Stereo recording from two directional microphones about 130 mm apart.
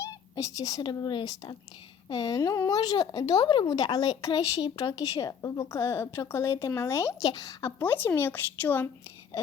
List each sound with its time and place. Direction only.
0.0 s speech: 25° left (ahead or behind)
7.8 s speech: 15° left (ahead or behind)